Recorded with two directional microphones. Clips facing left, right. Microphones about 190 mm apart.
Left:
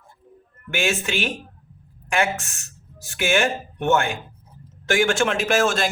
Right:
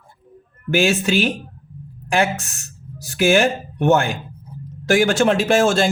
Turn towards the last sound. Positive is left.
turn(degrees=-30)  # may be behind; listen again after turning